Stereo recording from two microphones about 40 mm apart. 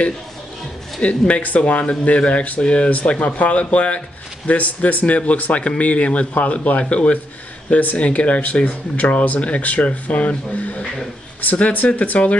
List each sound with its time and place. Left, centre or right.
1.0 s speech: left
7.7 s speech: left
8.0 s speech: left